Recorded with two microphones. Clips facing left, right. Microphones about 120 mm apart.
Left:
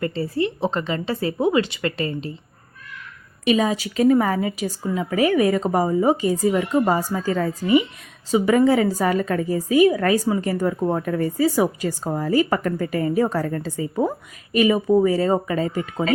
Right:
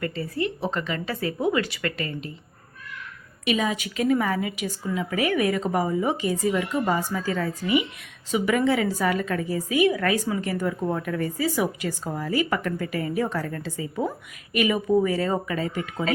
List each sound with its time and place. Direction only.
0.0 s a woman's voice: 30° left (ahead or behind)
3.4 s a woman's voice: 35° left (ahead or behind)